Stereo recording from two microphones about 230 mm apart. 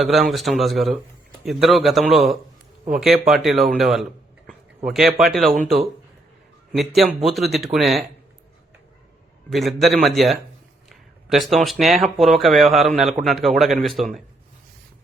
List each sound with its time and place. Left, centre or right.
0.0 s speech: centre
9.5 s speech: centre